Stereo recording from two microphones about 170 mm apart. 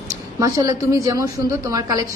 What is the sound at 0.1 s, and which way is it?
A woman's voice, 20° right (ahead or behind).